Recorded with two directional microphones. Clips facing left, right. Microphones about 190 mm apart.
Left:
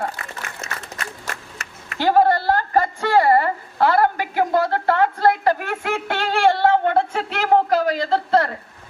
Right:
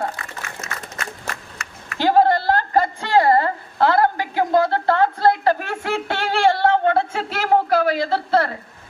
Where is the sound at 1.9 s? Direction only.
15° left (ahead or behind).